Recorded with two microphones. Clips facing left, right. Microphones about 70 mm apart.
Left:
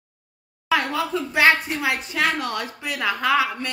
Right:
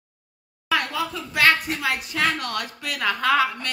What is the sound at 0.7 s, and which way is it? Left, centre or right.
A woman's voice, left.